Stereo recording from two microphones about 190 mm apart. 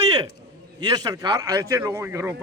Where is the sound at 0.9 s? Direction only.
20° right (ahead or behind).